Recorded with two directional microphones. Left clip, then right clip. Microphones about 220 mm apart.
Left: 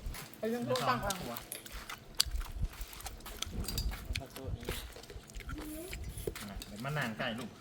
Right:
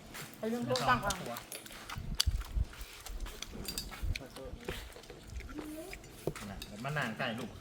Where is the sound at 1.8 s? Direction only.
Centre (ahead or behind).